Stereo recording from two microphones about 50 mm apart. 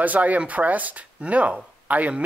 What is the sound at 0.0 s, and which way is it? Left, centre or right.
Speech, right.